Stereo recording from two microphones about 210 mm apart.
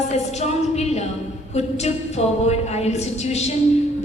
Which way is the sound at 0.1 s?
30° left (ahead or behind).